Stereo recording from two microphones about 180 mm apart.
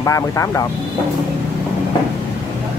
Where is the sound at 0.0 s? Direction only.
15° left (ahead or behind).